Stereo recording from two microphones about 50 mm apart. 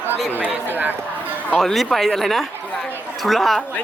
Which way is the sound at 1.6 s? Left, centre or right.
Centre.